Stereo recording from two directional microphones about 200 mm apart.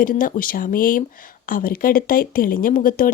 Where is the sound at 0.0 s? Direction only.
45° left (ahead or behind).